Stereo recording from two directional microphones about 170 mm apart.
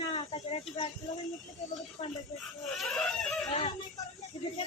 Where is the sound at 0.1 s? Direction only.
35° left (ahead or behind).